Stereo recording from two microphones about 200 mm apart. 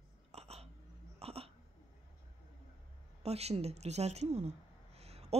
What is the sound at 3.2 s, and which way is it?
A woman's voice, 30° right (ahead or behind).